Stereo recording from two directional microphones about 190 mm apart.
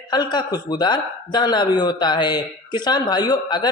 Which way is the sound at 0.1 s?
25° left (ahead or behind).